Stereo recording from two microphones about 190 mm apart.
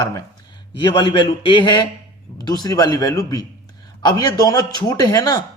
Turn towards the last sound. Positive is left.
turn(degrees=20)  # may be behind; listen again after turning